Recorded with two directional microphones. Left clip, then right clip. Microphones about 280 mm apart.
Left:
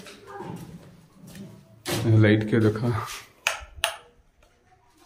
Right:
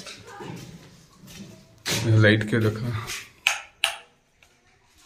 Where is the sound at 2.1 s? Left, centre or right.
Centre.